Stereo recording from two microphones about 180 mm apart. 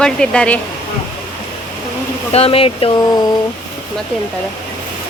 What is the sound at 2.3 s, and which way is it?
Speech, 35° left (ahead or behind).